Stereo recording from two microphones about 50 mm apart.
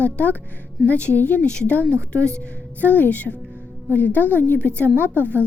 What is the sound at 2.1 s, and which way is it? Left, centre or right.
Speech, left.